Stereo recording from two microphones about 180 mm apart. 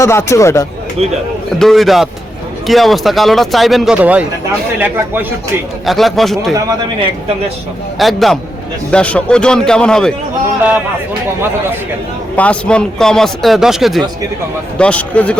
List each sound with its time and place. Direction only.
0.0 s speech: 15° left (ahead or behind)
1.5 s speech: centre (ahead or behind)
5.8 s speech: centre (ahead or behind)
7.9 s speech: centre (ahead or behind)
12.4 s speech: 5° left (ahead or behind)